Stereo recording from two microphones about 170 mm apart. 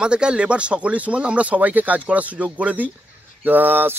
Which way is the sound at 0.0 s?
5° right (ahead or behind).